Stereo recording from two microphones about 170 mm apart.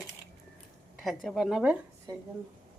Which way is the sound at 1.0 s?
Centre (ahead or behind).